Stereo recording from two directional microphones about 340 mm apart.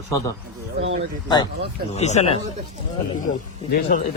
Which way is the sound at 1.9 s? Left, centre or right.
Centre.